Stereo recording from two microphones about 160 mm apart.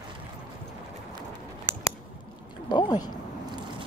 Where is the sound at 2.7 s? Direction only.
25° left (ahead or behind).